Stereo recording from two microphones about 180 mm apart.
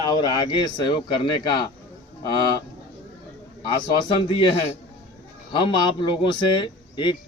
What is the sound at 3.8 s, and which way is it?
Speech, 25° left (ahead or behind).